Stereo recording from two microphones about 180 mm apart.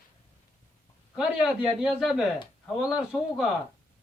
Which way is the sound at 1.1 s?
5° right (ahead or behind).